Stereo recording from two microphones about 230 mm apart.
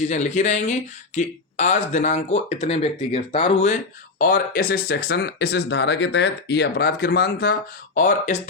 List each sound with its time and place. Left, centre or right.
0.1 s speech: left
4.2 s speech: left